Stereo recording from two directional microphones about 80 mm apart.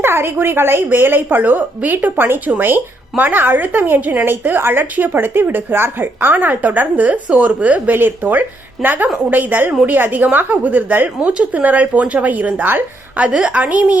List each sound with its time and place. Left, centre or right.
0.0 s a woman's voice: right